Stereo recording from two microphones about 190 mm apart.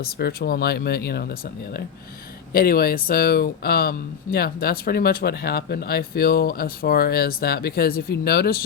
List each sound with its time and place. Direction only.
0.0 s speech: 55° left (ahead or behind)
2.5 s speech: 50° left (ahead or behind)